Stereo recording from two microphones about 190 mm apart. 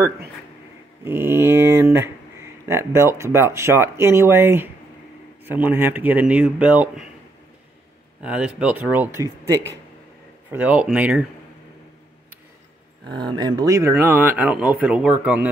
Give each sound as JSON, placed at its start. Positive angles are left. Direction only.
{"t": 1.0, "sound": "speech", "side_deg": -10}
{"t": 8.2, "sound": "speech", "side_deg": -5}
{"t": 13.1, "sound": "speech", "side_deg": -25}